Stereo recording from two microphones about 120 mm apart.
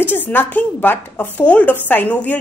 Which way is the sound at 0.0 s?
15° left (ahead or behind).